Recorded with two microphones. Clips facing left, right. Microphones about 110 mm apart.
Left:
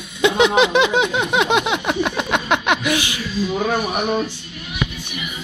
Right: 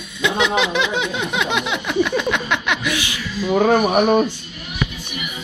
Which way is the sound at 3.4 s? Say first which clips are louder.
Right 7 dB; 50° right (ahead or behind).